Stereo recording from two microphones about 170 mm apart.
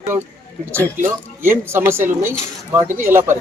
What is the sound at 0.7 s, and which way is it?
Speech, 15° right (ahead or behind).